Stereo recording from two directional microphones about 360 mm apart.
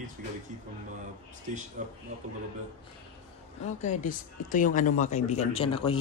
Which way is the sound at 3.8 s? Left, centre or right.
Left.